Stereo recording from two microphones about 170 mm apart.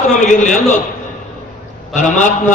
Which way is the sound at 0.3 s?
45° left (ahead or behind).